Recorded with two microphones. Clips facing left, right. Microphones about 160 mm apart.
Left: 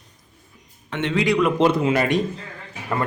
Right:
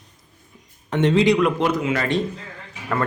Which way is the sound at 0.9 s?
40° right (ahead or behind).